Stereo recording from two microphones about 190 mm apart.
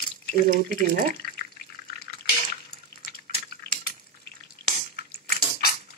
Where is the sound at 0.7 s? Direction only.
45° right (ahead or behind).